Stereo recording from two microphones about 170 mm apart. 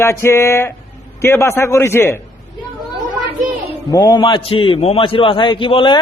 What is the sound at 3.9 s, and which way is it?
A man's voice, 25° left (ahead or behind).